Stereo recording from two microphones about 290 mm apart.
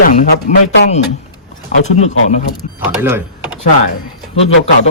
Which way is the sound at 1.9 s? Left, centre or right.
Left.